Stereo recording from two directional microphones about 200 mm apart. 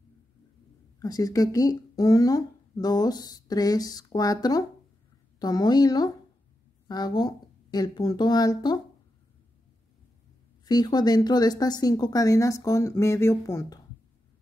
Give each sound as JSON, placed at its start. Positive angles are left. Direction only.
{"t": 0.9, "sound": "speech", "side_deg": 20}
{"t": 10.6, "sound": "speech", "side_deg": 20}